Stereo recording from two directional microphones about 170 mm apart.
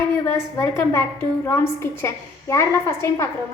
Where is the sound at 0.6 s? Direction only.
15° left (ahead or behind).